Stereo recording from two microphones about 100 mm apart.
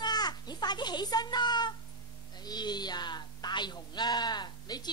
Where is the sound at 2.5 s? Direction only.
45° left (ahead or behind).